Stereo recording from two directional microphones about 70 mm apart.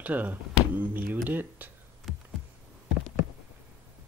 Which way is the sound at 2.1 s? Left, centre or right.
Centre.